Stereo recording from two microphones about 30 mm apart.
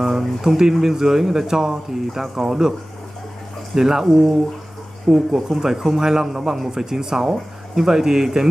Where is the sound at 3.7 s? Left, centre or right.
Centre.